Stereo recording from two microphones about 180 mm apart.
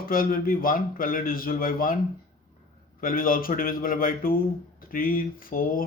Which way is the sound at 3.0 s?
50° left (ahead or behind).